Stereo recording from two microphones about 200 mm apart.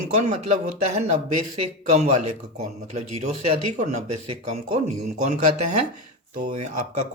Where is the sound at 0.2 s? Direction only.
35° right (ahead or behind).